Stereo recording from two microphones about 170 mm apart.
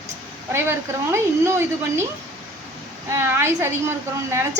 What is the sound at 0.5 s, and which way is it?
A woman's voice, 15° right (ahead or behind).